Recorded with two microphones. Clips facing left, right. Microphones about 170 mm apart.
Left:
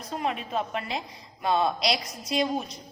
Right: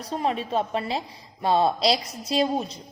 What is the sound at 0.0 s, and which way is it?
A woman's voice, 35° right (ahead or behind).